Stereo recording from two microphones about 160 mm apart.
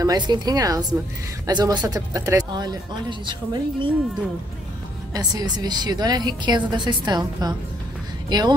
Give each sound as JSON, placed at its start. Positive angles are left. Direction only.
{"t": 0.0, "sound": "speech", "side_deg": -25}
{"t": 5.1, "sound": "speech", "side_deg": -25}